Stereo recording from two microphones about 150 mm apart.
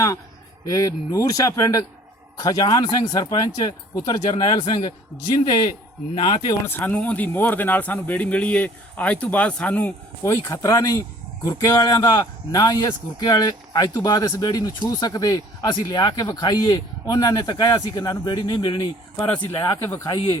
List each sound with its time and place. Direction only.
0.7 s speech: 20° left (ahead or behind)
6.7 s a man's voice: 10° left (ahead or behind)
10.5 s speech: 20° left (ahead or behind)
19.1 s speech: 10° left (ahead or behind)